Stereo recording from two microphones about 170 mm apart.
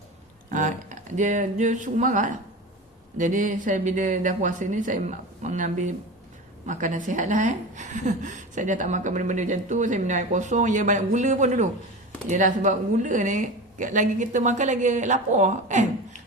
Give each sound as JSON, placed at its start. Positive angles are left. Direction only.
{"t": 0.5, "sound": "a woman's voice", "side_deg": -50}